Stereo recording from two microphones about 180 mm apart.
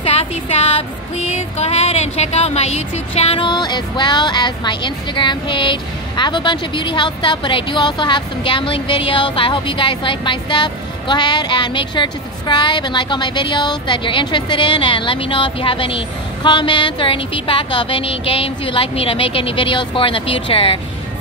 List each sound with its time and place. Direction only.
0.0 s music: 35° left (ahead or behind)